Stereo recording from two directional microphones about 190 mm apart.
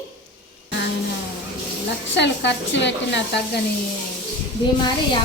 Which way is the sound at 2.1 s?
65° left (ahead or behind).